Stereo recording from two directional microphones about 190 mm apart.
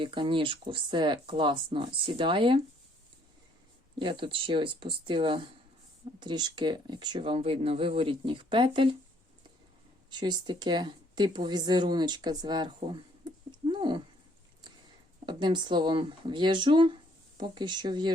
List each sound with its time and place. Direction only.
0.0 s speech: 25° right (ahead or behind)
3.9 s speech: 25° right (ahead or behind)
10.1 s a woman's voice: 25° right (ahead or behind)
15.3 s speech: 25° right (ahead or behind)